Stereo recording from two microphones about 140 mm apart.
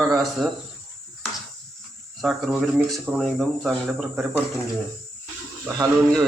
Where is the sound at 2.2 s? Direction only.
Centre (ahead or behind).